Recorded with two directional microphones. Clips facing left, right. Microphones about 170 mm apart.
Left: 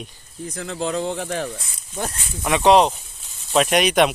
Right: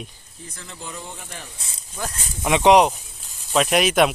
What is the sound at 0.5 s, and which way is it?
Speech, 70° left (ahead or behind).